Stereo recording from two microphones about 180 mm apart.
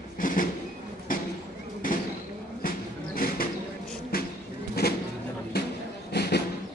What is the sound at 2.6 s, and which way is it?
Vehicle, 55° left (ahead or behind).